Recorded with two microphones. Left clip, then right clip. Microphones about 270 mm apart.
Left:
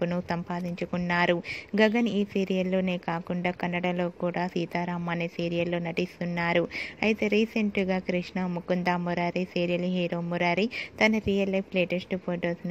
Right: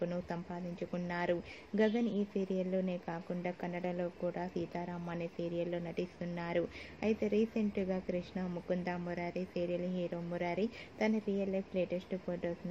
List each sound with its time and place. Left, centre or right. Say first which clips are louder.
0.0 s speech: left 9 dB; left